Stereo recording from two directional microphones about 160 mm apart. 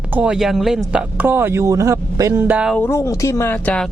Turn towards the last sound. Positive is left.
turn(degrees=10)  # may be behind; listen again after turning